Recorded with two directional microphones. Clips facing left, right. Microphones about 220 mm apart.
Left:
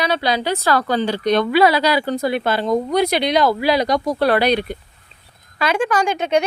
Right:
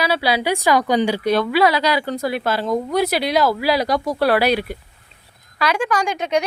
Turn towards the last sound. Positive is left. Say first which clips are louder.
# left 2 dB
turn(degrees=30)  # may be behind; listen again after turning